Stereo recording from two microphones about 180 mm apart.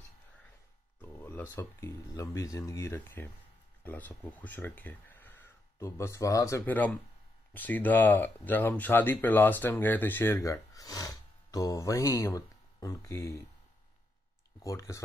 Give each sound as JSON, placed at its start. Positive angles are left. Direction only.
{"t": 1.0, "sound": "speech", "side_deg": 10}
{"t": 14.6, "sound": "speech", "side_deg": 15}